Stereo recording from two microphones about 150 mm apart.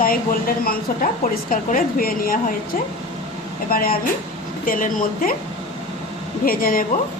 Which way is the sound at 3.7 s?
75° left (ahead or behind).